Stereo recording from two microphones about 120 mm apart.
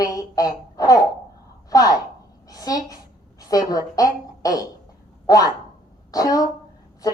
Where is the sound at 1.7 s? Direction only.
30° left (ahead or behind).